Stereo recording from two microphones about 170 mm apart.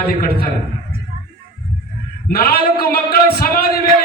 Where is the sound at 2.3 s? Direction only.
60° left (ahead or behind).